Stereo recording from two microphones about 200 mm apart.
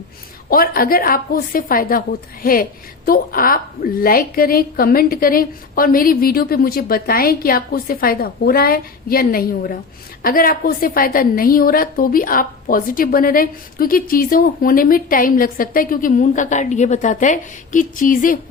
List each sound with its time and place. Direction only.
0.5 s a woman's voice: 45° left (ahead or behind)